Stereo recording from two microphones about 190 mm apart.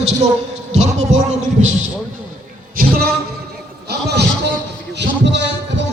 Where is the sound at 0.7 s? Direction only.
35° right (ahead or behind).